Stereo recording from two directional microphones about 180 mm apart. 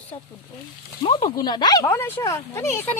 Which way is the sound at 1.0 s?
25° left (ahead or behind).